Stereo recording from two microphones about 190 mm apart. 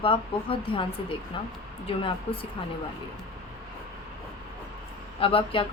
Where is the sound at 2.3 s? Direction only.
30° left (ahead or behind).